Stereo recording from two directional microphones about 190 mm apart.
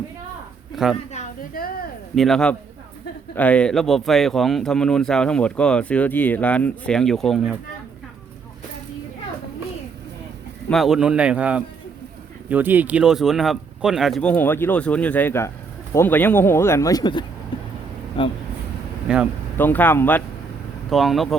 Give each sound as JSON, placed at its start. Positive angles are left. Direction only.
{"t": 2.1, "sound": "speech", "side_deg": 0}
{"t": 10.7, "sound": "speech", "side_deg": 0}
{"t": 17.5, "sound": "vehicle", "side_deg": 25}
{"t": 18.2, "sound": "speech", "side_deg": 25}
{"t": 19.0, "sound": "speech", "side_deg": -5}
{"t": 19.5, "sound": "speech", "side_deg": 10}
{"t": 20.9, "sound": "speech", "side_deg": 0}